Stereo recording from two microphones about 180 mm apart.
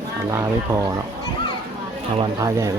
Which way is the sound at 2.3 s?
15° right (ahead or behind).